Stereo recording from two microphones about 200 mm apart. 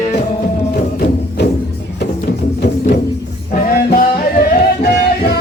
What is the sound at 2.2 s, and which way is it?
Music, 45° left (ahead or behind).